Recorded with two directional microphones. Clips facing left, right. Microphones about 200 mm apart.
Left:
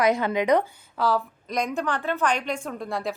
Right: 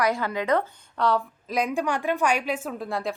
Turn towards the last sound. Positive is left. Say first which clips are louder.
# even
turn(degrees=0)  # may be behind; listen again after turning